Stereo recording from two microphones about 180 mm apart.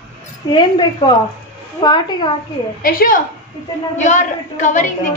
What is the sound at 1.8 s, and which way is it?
Speech, 25° left (ahead or behind).